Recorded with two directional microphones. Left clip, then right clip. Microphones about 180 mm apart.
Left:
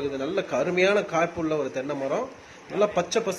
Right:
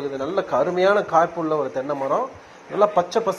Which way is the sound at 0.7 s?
30° left (ahead or behind).